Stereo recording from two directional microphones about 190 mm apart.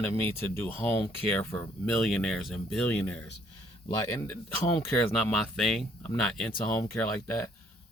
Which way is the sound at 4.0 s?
20° left (ahead or behind).